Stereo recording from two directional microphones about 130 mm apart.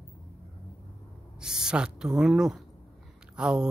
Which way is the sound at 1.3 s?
5° right (ahead or behind).